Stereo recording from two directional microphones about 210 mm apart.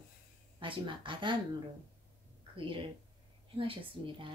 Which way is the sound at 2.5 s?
25° right (ahead or behind).